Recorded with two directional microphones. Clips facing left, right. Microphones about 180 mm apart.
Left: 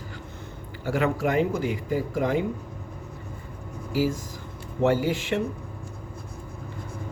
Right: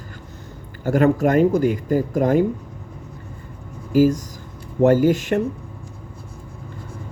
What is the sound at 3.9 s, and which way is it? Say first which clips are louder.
Speech: right 10 dB; 50° right (ahead or behind).